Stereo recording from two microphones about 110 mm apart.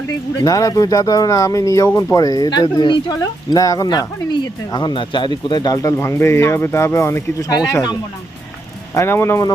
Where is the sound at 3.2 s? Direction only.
30° left (ahead or behind).